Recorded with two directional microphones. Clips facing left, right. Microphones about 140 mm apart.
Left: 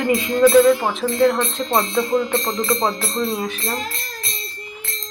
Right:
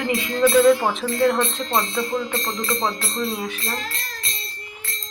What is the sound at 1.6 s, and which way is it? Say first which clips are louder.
Speech: left 4 dB; 15° left (ahead or behind).